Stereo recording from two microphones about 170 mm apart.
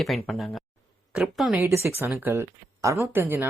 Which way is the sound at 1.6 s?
15° right (ahead or behind).